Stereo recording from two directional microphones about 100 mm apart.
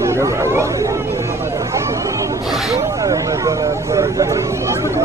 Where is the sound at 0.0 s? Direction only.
30° right (ahead or behind).